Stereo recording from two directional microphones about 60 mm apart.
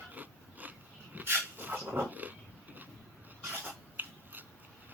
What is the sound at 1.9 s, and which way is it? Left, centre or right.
Cat, right.